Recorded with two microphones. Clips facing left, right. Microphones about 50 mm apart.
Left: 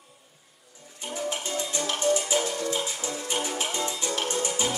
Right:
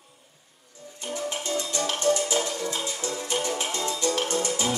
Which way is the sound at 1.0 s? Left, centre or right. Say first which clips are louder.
Right 1 dB; centre.